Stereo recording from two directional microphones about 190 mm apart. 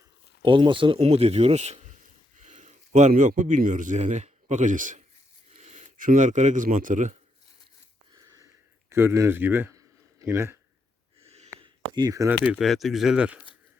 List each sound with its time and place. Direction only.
0.4 s a man's voice: 25° right (ahead or behind); by 7.2 s 40° right (ahead or behind)
8.1 s sniff: 20° right (ahead or behind)
8.9 s speech: 15° right (ahead or behind)
11.2 s a sound: 35° right (ahead or behind)
11.6 s speech: 20° right (ahead or behind)
12.5 s speech: centre (ahead or behind)